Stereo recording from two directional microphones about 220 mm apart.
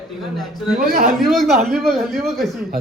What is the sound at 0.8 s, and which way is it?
Speech, 40° right (ahead or behind).